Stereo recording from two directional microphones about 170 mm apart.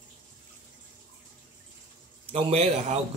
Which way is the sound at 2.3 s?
35° right (ahead or behind).